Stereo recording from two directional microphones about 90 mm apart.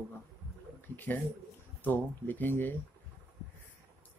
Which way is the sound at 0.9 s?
20° left (ahead or behind).